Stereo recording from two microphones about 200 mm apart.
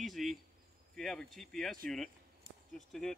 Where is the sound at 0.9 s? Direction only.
Centre (ahead or behind).